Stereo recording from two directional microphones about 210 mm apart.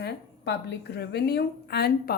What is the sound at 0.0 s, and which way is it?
A woman's voice, 50° left (ahead or behind).